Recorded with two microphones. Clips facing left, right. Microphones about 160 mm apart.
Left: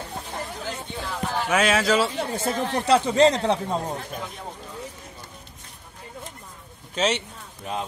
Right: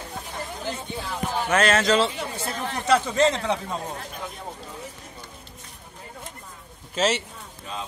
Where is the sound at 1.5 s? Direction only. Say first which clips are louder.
Right 1 dB; 5° left (ahead or behind).